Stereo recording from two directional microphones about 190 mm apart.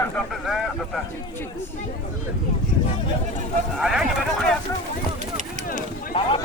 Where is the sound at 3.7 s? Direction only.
5° right (ahead or behind).